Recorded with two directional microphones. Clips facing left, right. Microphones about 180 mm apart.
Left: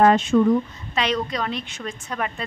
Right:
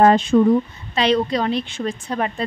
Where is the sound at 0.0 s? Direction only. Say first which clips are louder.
Right 2 dB; 35° right (ahead or behind).